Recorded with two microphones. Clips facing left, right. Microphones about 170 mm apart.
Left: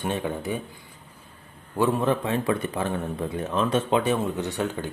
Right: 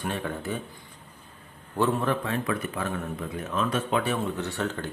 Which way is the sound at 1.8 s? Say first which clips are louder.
Left 3 dB; 15° left (ahead or behind).